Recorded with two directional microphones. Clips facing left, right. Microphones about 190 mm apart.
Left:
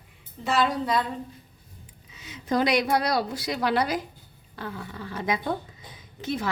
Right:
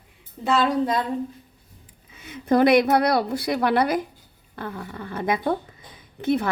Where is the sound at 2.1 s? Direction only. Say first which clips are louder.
Right 6 dB; 55° right (ahead or behind).